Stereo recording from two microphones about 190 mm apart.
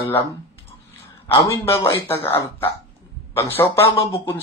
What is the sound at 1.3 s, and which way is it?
Speech, 15° left (ahead or behind).